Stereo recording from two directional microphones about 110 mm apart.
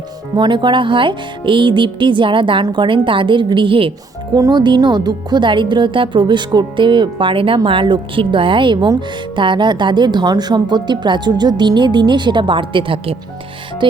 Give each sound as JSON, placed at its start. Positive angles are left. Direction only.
{"t": 0.3, "sound": "speech", "side_deg": -45}
{"t": 4.4, "sound": "speech", "side_deg": -35}